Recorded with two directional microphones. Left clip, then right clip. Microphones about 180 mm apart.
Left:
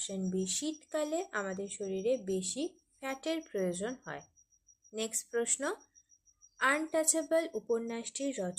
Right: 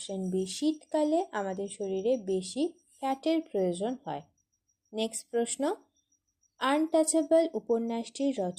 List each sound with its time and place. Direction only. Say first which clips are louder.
0.0 s speech: right 4 dB; 20° right (ahead or behind)